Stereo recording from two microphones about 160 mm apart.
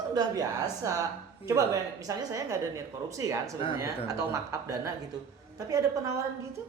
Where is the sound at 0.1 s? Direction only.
25° right (ahead or behind).